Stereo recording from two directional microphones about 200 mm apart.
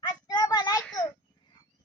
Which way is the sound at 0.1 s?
20° left (ahead or behind).